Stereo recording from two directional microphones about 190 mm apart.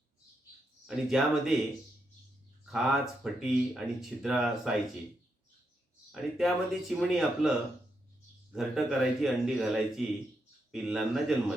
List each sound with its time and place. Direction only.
0.9 s speech: centre (ahead or behind)
2.6 s speech: 5° right (ahead or behind)
6.1 s speech: centre (ahead or behind)
8.5 s speech: centre (ahead or behind)